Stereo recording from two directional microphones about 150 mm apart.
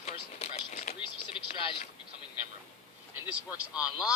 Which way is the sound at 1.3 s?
35° left (ahead or behind).